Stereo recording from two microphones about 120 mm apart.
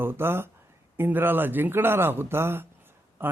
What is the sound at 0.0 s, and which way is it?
A man's voice, 20° right (ahead or behind).